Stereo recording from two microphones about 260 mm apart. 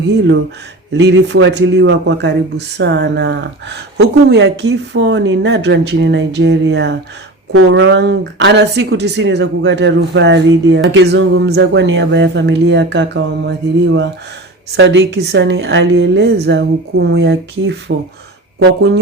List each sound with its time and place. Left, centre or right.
0.9 s a woman's voice: right
14.8 s a woman's voice: right